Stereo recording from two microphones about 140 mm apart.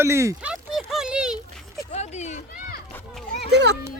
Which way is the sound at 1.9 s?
55° left (ahead or behind).